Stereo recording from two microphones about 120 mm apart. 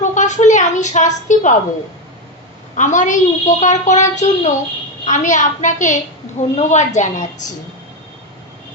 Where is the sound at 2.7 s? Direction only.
90° left.